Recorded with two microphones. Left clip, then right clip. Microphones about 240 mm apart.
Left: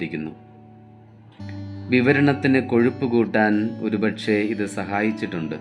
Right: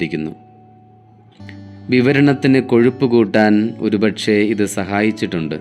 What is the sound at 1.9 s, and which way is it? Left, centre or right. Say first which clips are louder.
Speech: right 4 dB; right.